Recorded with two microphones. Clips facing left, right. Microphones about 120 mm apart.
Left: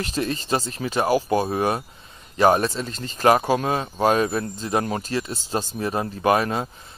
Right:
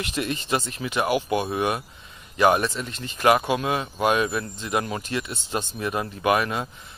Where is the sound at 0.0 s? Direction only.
35° left (ahead or behind).